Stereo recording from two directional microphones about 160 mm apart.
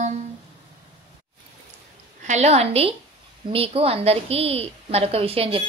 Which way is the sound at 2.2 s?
45° right (ahead or behind).